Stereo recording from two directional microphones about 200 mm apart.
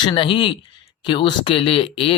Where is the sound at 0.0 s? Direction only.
25° left (ahead or behind).